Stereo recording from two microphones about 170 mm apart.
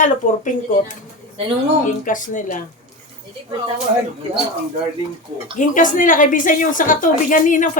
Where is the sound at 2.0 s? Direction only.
50° left (ahead or behind).